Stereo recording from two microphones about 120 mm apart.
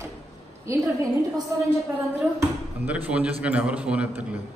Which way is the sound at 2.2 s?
10° right (ahead or behind).